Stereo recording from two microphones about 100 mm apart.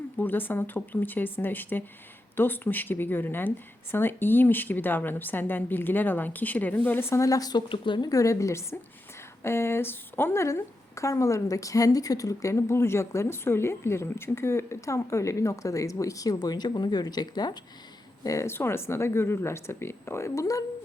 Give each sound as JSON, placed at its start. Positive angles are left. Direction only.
{"t": 0.2, "sound": "speech", "side_deg": 20}
{"t": 7.7, "sound": "speech", "side_deg": 50}
{"t": 8.1, "sound": "a woman's voice", "side_deg": 30}
{"t": 18.2, "sound": "speech", "side_deg": 30}